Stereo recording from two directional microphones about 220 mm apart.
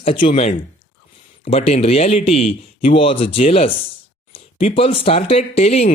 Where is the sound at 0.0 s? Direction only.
30° left (ahead or behind).